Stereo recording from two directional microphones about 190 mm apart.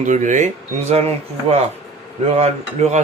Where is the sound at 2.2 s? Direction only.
35° right (ahead or behind).